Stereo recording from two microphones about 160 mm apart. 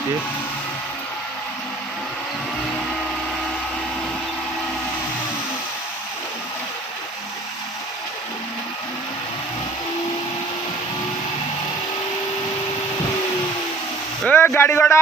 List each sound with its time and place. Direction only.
14.3 s speech: 10° left (ahead or behind)